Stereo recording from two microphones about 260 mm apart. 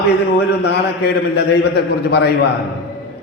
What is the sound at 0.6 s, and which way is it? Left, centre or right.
A man's voice, left.